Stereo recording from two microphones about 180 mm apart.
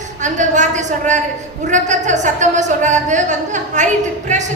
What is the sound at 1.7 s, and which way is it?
A woman's voice, 40° right (ahead or behind).